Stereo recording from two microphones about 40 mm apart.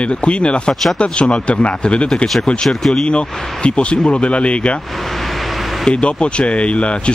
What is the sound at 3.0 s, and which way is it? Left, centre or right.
Speech, left.